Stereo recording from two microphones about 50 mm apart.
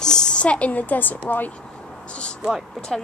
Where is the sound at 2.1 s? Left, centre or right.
Left.